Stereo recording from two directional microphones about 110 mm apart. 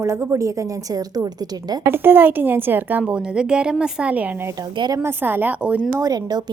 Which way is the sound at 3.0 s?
5° right (ahead or behind).